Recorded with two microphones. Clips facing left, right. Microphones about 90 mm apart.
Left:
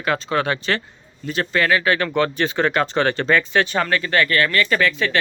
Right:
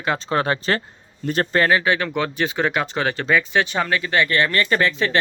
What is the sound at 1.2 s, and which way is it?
Speech, 45° right (ahead or behind).